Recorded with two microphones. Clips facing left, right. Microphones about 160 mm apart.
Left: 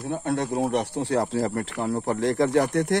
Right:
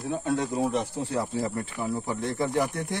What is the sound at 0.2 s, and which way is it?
Speech, 65° left (ahead or behind).